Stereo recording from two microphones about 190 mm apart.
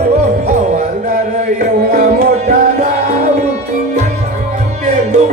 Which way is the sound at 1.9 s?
55° right (ahead or behind).